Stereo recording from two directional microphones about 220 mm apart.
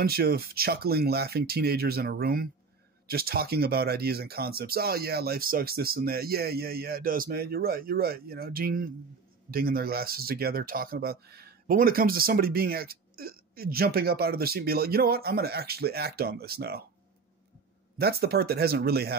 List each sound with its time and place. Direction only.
0.0 s speech: 45° right (ahead or behind)
17.9 s speech: 45° right (ahead or behind)